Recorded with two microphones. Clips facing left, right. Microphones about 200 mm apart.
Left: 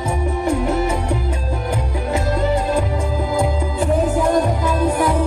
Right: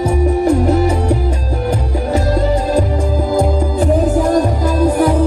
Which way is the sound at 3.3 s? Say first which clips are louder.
Right 6 dB; 35° right (ahead or behind).